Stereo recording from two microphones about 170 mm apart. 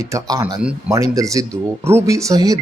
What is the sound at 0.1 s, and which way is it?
Speech, 20° right (ahead or behind).